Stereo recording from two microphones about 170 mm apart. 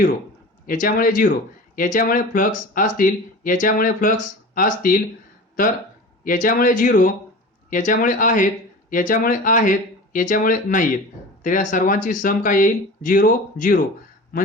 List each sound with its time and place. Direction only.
0.7 s speech: 55° left (ahead or behind)
6.2 s speech: 50° left (ahead or behind)